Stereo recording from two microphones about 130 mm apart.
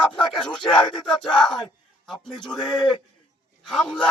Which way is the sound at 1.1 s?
35° left (ahead or behind).